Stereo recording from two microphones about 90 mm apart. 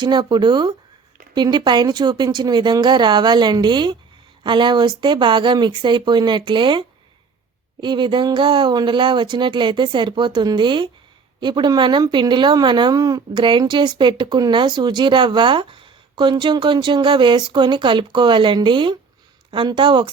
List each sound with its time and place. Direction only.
0.0 s a woman's voice: 55° right (ahead or behind)